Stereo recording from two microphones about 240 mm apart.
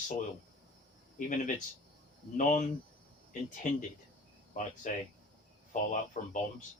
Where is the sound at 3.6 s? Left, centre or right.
Left.